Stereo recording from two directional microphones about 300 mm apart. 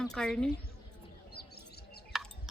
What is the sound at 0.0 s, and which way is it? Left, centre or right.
Speech, centre.